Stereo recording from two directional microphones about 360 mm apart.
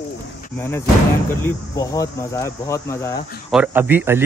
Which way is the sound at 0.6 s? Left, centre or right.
Centre.